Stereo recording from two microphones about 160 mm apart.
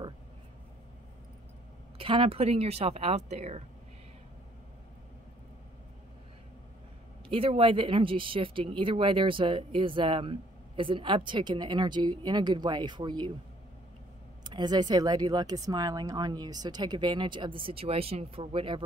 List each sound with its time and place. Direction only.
2.0 s speech: 35° right (ahead or behind)
7.2 s speech: 35° right (ahead or behind)
14.4 s speech: 25° right (ahead or behind)